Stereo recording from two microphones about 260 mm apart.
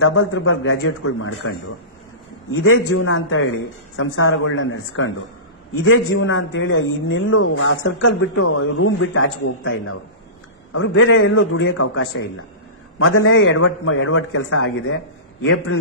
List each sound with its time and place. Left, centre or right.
0.0 s a man's voice: left
2.5 s a man's voice: left
8.5 s a man's voice: left